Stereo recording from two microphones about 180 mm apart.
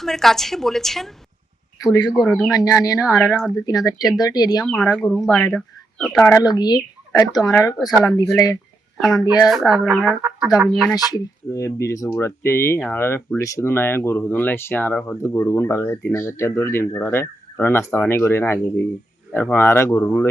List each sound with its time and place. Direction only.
0.0 s speech: centre (ahead or behind)
1.8 s speech: 20° left (ahead or behind)
2.1 s speech: centre (ahead or behind)
2.5 s speech: 20° left (ahead or behind)
3.1 s speech: centre (ahead or behind)
3.7 s speech: 20° left (ahead or behind)
4.6 s speech: centre (ahead or behind)
6.1 s speech: 15° left (ahead or behind)
9.0 s speech: centre (ahead or behind)
9.2 s speech: 20° left (ahead or behind)
9.5 s speech: centre (ahead or behind)
10.9 s speech: 20° left (ahead or behind)